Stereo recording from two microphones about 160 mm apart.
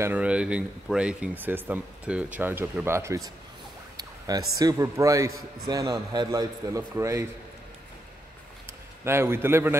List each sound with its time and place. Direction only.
0.0 s a man's voice: 10° right (ahead or behind)
9.0 s speech: 15° right (ahead or behind)